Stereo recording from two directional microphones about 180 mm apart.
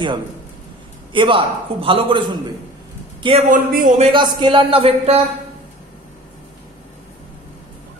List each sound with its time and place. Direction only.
1.1 s a man's voice: 30° right (ahead or behind)
3.4 s a man's voice: 45° right (ahead or behind)
4.1 s speech: 25° right (ahead or behind)